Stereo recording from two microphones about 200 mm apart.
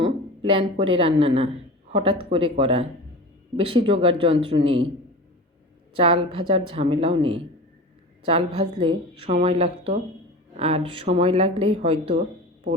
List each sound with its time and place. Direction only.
0.4 s speech: 25° right (ahead or behind)
6.0 s speech: 25° right (ahead or behind)